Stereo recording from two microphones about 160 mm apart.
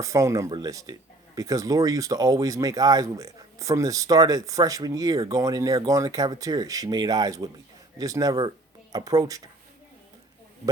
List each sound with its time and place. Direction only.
0.0 s speech: 20° right (ahead or behind)